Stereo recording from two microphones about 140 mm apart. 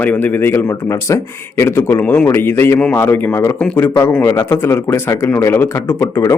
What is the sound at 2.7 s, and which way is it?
Speech, 5° left (ahead or behind).